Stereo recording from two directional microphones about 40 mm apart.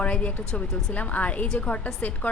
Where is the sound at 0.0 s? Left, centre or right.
Left.